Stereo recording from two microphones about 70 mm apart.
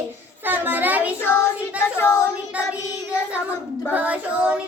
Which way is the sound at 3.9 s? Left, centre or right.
Right.